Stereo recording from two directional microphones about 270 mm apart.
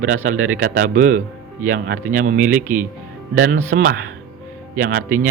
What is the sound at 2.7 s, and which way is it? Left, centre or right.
Speech, centre.